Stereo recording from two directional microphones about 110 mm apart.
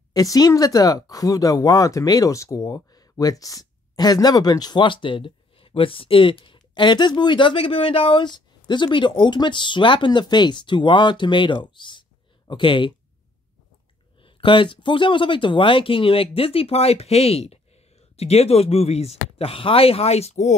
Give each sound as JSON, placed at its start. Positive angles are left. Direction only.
{"t": 0.1, "sound": "speech", "side_deg": 35}
{"t": 14.2, "sound": "speech", "side_deg": 50}